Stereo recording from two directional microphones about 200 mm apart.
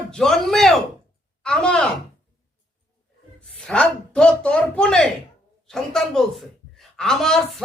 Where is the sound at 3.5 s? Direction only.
5° left (ahead or behind).